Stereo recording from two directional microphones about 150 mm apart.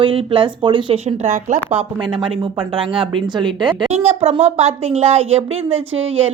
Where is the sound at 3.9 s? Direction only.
45° right (ahead or behind).